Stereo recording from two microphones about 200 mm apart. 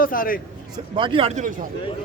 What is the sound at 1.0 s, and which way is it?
Speech, 25° right (ahead or behind).